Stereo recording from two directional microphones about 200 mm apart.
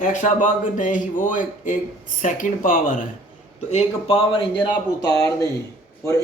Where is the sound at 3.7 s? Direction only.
30° left (ahead or behind).